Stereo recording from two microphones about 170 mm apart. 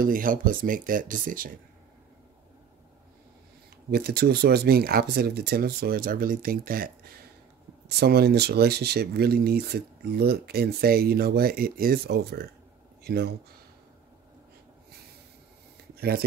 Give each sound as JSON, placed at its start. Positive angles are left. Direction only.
{"t": 0.0, "sound": "speech", "side_deg": -55}
{"t": 3.9, "sound": "speech", "side_deg": -65}
{"t": 8.0, "sound": "speech", "side_deg": -70}
{"t": 15.9, "sound": "a sound", "side_deg": -65}